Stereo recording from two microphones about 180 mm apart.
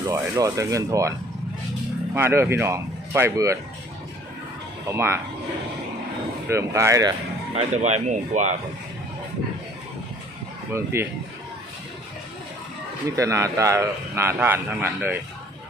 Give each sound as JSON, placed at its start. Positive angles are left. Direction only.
{"t": 0.1, "sound": "a man's voice", "side_deg": -15}
{"t": 2.1, "sound": "a man's voice", "side_deg": -15}
{"t": 4.9, "sound": "a man's voice", "side_deg": -15}
{"t": 6.5, "sound": "a man's voice", "side_deg": -15}
{"t": 7.5, "sound": "speech", "side_deg": -35}
{"t": 10.7, "sound": "a man's voice", "side_deg": -15}
{"t": 13.1, "sound": "a man's voice", "side_deg": -15}